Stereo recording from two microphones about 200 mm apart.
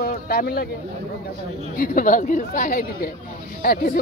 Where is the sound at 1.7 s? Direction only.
45° left (ahead or behind).